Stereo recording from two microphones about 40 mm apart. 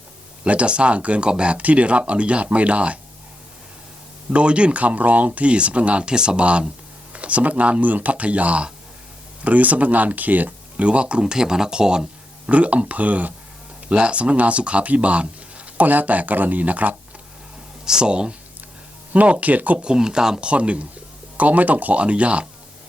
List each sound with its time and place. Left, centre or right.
0.4 s speech: right
4.4 s speech: right
10.8 s speech: right
12.5 s speech: right
13.8 s speech: right
15.9 s speech: right
17.8 s speech: centre
19.1 s speech: right
19.8 s speech: right
20.5 s speech: right
22.0 s speech: right